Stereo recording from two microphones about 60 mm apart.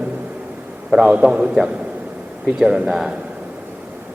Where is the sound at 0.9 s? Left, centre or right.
Centre.